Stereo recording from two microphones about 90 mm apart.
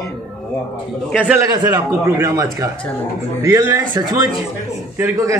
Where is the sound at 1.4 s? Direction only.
40° right (ahead or behind).